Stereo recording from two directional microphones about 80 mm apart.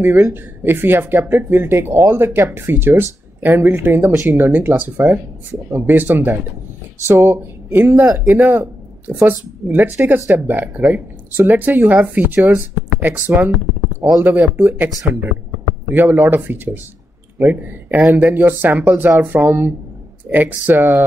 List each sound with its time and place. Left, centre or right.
0.0 s speech: right